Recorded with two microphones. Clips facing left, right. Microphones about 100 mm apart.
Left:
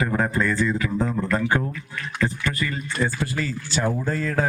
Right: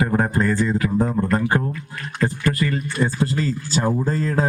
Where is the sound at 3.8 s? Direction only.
35° right (ahead or behind).